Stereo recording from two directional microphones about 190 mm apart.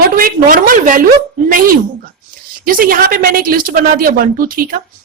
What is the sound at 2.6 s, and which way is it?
Speech, 50° right (ahead or behind).